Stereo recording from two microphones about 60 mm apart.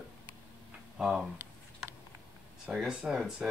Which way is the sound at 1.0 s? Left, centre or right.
Centre.